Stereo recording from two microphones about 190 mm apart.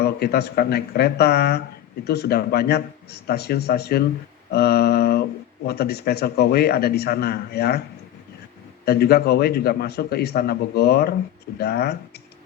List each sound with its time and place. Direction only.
0.0 s a man's voice: 55° left (ahead or behind)
4.5 s a sound: 55° left (ahead or behind)
5.6 s a man's voice: 60° left (ahead or behind)
8.8 s a man's voice: 55° left (ahead or behind)